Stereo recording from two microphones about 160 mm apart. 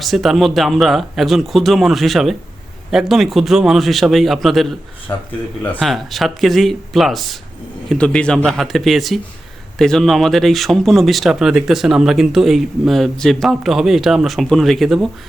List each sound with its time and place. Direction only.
0.0 s speech: centre (ahead or behind)
5.1 s speech: 20° left (ahead or behind)
5.8 s speech: centre (ahead or behind)